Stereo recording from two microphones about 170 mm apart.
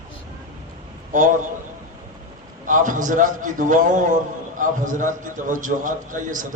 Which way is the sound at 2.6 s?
50° right (ahead or behind).